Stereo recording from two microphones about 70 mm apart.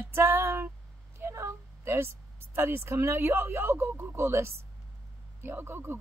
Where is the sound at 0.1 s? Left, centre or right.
Right.